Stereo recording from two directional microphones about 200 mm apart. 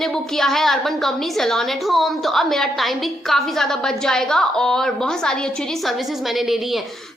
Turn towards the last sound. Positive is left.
turn(degrees=5)  # may be behind; listen again after turning